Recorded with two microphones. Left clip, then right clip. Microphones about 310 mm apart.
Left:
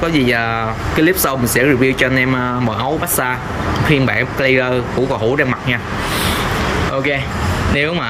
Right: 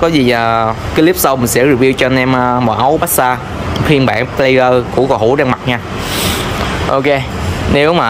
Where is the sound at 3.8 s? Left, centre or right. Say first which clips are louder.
Right 4 dB; centre.